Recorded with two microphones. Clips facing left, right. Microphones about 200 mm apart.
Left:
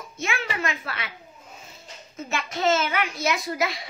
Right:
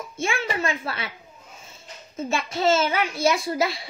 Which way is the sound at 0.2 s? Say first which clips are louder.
Right 3 dB; 30° right (ahead or behind).